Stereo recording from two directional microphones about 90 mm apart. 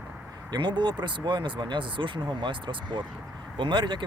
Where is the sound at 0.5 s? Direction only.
60° right (ahead or behind).